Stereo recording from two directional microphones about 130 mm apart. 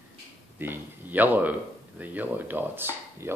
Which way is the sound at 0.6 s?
15° right (ahead or behind).